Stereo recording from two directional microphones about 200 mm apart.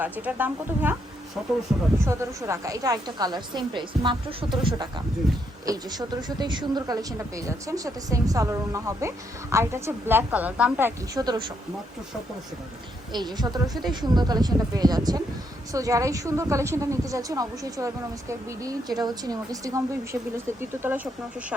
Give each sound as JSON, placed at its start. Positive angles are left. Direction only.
{"t": 0.0, "sound": "speech", "side_deg": -10}
{"t": 2.0, "sound": "a woman's voice", "side_deg": -15}
{"t": 13.1, "sound": "a woman's voice", "side_deg": -20}